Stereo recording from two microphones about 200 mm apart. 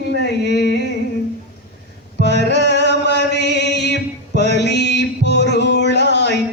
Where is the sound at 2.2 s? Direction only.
60° left (ahead or behind).